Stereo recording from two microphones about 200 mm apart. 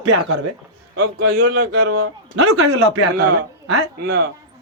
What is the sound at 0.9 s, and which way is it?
Speech, 50° right (ahead or behind).